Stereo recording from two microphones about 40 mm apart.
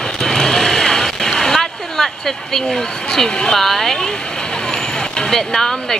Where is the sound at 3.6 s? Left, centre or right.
Centre.